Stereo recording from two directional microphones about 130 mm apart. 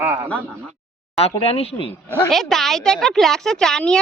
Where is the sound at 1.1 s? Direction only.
50° left (ahead or behind).